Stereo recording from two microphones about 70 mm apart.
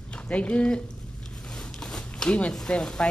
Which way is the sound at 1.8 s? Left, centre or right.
Centre.